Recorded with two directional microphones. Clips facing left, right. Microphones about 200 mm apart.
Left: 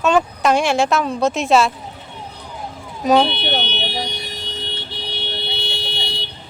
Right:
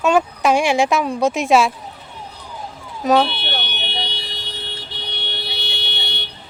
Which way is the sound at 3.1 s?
Centre (ahead or behind).